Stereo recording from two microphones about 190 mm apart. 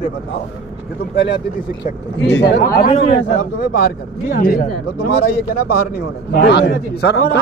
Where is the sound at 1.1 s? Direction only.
65° left (ahead or behind).